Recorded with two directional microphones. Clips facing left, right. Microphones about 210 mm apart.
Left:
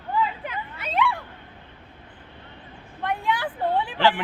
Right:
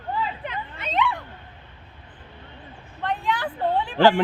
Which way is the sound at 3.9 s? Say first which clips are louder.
Right 7 dB; 45° right (ahead or behind).